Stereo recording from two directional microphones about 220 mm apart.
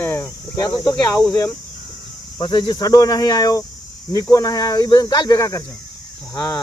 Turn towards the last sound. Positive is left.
turn(degrees=10)  # may be behind; listen again after turning